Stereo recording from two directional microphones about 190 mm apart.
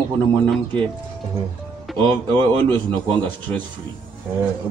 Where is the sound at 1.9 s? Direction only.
Centre (ahead or behind).